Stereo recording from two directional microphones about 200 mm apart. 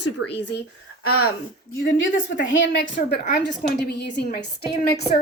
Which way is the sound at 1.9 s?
70° left (ahead or behind).